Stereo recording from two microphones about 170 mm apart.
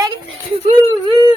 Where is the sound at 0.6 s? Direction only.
30° right (ahead or behind).